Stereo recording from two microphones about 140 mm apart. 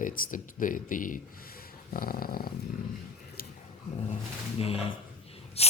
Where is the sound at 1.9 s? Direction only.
90° left.